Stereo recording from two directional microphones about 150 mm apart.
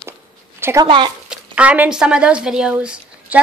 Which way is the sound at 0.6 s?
15° right (ahead or behind).